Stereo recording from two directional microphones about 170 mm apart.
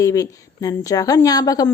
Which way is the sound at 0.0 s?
20° left (ahead or behind).